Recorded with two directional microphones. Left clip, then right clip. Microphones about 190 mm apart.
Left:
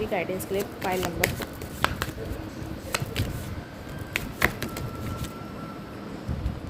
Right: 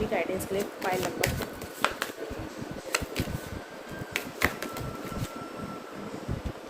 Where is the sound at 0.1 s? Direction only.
25° left (ahead or behind).